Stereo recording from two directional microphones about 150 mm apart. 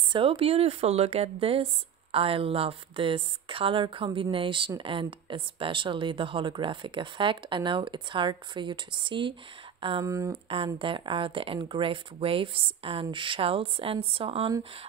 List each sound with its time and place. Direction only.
0.1 s speech: 35° right (ahead or behind)
10.0 s speech: 20° right (ahead or behind)
10.5 s speech: 35° right (ahead or behind)